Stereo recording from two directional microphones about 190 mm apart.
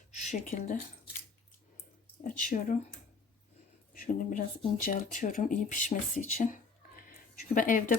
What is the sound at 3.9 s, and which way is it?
Speech, 45° left (ahead or behind).